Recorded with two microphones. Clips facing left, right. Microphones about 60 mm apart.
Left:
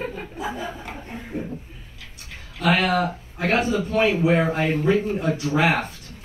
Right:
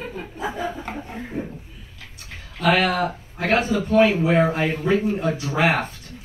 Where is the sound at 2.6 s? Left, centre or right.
Right.